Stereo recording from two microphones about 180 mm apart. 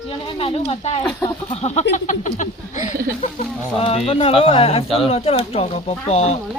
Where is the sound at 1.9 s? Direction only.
45° left (ahead or behind).